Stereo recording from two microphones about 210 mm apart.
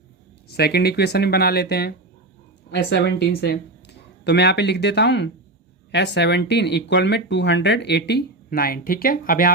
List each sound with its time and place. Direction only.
0.4 s speech: 50° left (ahead or behind)